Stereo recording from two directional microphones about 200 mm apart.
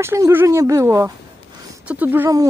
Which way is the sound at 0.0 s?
15° right (ahead or behind).